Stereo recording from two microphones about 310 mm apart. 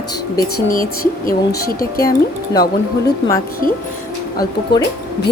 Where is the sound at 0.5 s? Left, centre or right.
Left.